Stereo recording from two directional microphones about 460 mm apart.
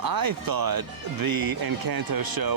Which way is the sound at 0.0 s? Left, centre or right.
Right.